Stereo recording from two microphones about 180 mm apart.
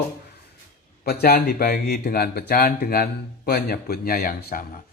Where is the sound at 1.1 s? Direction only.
55° left (ahead or behind).